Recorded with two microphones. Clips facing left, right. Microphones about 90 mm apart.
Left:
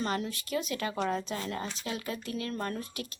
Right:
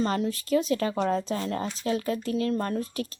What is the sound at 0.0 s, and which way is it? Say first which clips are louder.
Speech: right 6 dB; 35° right (ahead or behind).